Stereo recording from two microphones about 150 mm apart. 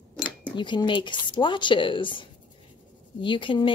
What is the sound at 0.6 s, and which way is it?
Speech, 30° left (ahead or behind).